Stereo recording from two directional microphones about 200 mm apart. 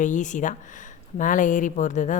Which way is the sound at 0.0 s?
40° left (ahead or behind).